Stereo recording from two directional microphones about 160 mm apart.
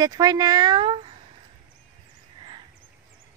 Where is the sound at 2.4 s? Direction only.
30° right (ahead or behind).